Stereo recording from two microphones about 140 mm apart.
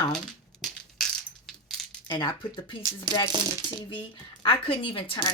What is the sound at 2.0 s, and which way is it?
Speech, 30° left (ahead or behind).